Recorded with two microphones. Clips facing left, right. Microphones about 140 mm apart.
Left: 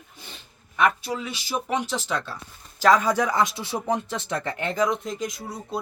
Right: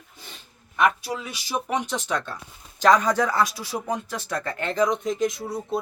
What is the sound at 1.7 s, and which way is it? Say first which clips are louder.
Speech: even; centre (ahead or behind).